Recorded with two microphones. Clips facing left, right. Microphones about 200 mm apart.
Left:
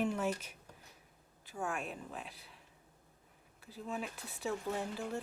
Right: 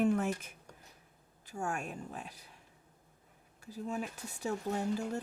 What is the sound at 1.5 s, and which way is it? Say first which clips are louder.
Speech: right 2 dB; 45° right (ahead or behind).